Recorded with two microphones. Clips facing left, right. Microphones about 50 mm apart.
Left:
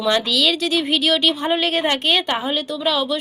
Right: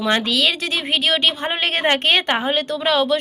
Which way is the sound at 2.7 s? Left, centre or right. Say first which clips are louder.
Right 3 dB; right.